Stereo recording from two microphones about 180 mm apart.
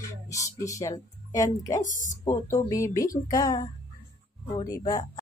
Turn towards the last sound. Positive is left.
turn(degrees=25)  # may be behind; listen again after turning